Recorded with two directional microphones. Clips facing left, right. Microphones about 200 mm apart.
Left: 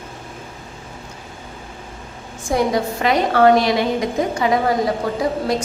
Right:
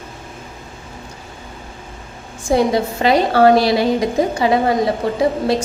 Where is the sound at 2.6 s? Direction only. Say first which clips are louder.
Right 2 dB; 30° right (ahead or behind).